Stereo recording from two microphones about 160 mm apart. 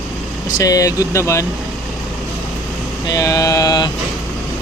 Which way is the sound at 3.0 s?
20° left (ahead or behind).